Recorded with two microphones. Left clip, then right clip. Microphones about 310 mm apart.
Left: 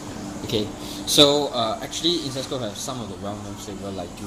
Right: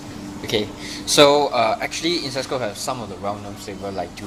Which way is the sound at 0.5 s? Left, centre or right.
Right.